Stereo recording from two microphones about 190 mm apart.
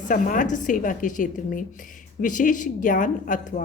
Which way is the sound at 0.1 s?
45° left (ahead or behind).